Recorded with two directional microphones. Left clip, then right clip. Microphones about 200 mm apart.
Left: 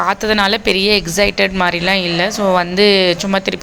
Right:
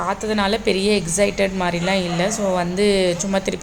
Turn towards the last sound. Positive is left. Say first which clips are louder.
# left 5 dB
turn(degrees=10)  # may be behind; listen again after turning